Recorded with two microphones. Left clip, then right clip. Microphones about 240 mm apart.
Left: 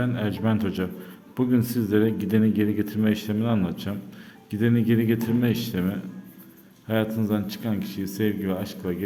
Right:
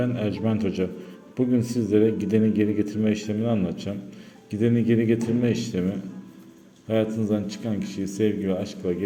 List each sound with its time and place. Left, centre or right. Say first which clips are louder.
0.0 s speech: right 1 dB; centre